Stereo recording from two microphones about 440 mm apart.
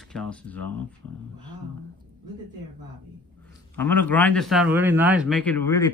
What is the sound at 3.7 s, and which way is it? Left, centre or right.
A man's voice, centre.